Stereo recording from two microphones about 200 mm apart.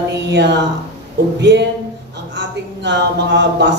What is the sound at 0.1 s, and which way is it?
A woman's voice, 60° right (ahead or behind).